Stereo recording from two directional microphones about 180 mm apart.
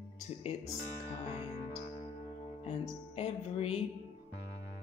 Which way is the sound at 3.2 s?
35° left (ahead or behind).